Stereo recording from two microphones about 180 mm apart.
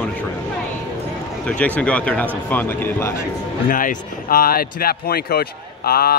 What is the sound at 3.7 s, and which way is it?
Speech, 50° left (ahead or behind).